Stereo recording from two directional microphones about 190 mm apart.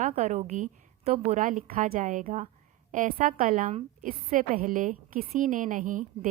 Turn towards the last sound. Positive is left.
turn(degrees=-45)  # may be behind; listen again after turning